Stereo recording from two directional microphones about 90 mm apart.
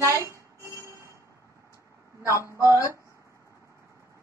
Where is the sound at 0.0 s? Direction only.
35° right (ahead or behind).